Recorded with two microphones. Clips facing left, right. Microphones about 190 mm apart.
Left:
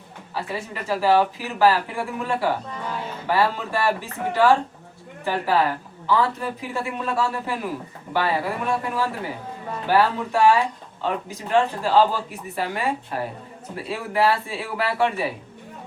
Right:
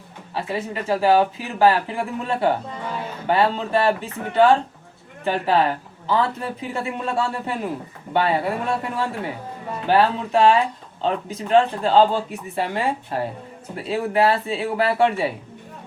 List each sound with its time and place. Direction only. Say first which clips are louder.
0.3 s speech: right 4 dB; 25° right (ahead or behind)